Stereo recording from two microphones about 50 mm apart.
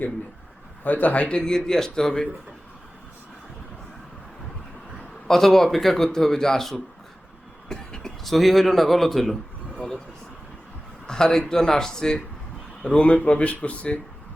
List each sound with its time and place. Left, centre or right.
0.9 s a man's voice: left; by 2.3 s centre
5.3 s a man's voice: centre
7.7 s a sound: centre
8.2 s speech: centre
11.0 s a man's voice: centre
13.0 s speech: left